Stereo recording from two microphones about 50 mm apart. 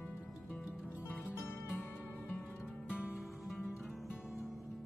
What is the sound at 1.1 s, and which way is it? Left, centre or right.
Music, left.